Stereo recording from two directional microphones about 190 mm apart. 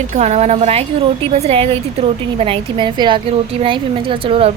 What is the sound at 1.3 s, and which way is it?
A woman's voice, 35° right (ahead or behind).